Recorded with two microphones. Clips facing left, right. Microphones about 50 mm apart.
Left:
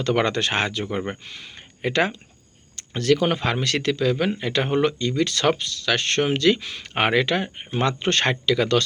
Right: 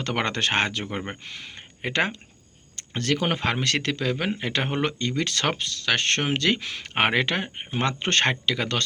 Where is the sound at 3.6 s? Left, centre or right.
Right.